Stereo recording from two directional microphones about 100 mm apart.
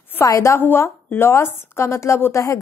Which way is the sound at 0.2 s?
30° left (ahead or behind).